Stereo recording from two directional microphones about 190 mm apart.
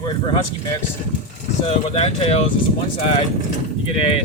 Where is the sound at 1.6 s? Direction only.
30° left (ahead or behind).